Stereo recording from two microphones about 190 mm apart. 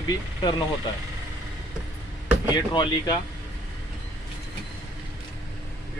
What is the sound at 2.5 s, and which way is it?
Speech, 20° left (ahead or behind).